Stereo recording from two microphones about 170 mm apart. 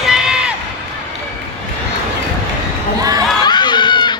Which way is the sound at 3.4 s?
25° left (ahead or behind).